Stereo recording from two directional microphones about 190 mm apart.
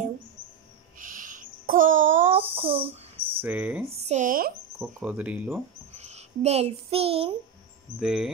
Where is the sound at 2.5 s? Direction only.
30° right (ahead or behind).